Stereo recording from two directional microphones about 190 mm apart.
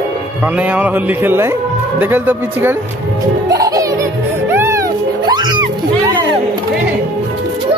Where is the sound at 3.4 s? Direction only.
20° right (ahead or behind).